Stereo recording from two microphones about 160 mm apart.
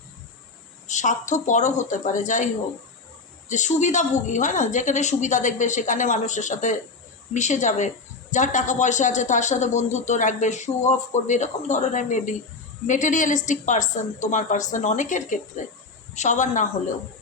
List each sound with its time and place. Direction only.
0.9 s a man's voice: 50° left (ahead or behind)
3.5 s a man's voice: 50° left (ahead or behind)